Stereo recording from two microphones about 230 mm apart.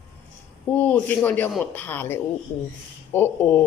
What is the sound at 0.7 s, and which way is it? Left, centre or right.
Speech, centre.